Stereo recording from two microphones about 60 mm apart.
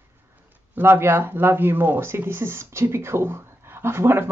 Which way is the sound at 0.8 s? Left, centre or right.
Right.